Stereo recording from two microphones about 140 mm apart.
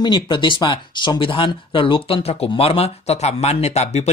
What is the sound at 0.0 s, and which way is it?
Speech, 35° left (ahead or behind).